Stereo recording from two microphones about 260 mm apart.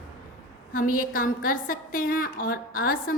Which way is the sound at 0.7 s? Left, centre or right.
Left.